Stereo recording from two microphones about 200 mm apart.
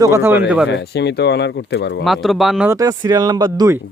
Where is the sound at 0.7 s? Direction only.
60° left (ahead or behind).